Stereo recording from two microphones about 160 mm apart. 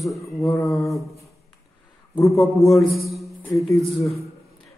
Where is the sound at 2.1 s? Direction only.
20° left (ahead or behind).